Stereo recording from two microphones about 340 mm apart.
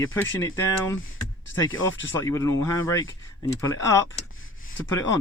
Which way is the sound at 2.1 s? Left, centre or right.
Centre.